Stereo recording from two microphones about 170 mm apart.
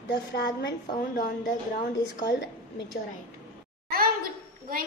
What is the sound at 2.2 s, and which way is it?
Speech, 90° left.